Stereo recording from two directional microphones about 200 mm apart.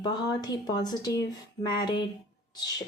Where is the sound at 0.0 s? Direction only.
20° left (ahead or behind).